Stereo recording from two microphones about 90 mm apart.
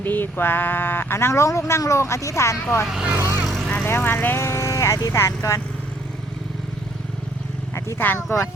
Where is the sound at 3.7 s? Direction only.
20° left (ahead or behind).